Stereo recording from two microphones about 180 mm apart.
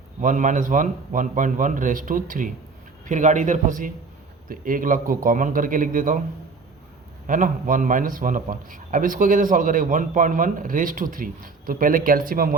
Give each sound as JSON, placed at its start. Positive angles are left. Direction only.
{"t": 0.2, "sound": "a man's voice", "side_deg": -45}
{"t": 7.3, "sound": "a man's voice", "side_deg": -50}